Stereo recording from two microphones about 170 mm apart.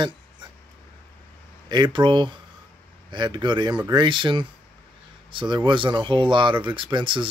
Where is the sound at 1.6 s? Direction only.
25° right (ahead or behind).